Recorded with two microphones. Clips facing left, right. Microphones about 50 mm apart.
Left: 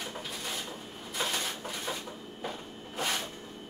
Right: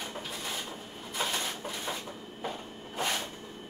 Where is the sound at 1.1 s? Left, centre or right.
Centre.